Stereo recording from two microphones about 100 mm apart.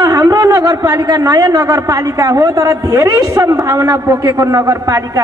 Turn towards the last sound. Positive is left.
turn(degrees=-35)  # may be behind; listen again after turning